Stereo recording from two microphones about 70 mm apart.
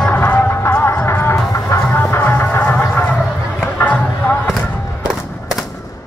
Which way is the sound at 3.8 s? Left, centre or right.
Left.